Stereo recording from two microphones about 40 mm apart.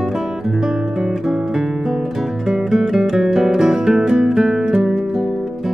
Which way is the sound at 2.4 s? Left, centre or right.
Centre.